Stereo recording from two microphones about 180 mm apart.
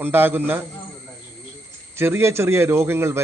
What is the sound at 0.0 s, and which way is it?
Speech, 10° right (ahead or behind).